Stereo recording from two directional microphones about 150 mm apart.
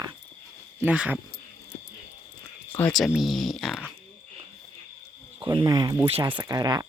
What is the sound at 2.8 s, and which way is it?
Speech, 5° left (ahead or behind).